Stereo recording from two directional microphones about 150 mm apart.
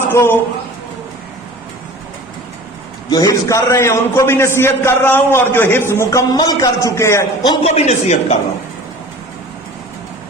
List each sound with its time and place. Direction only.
0.1 s a woman's voice: 15° left (ahead or behind)
3.1 s a man's voice: 25° left (ahead or behind)
7.6 s speech: 45° left (ahead or behind)